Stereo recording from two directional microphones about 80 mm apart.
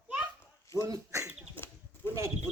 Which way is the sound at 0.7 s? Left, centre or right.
Right.